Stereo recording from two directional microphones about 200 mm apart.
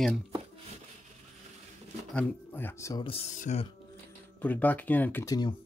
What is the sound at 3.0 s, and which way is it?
Speech, 35° left (ahead or behind).